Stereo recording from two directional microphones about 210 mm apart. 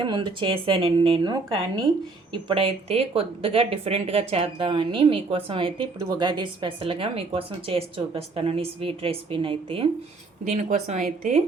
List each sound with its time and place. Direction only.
0.0 s speech: 20° right (ahead or behind)
10.4 s a woman's voice: 35° right (ahead or behind)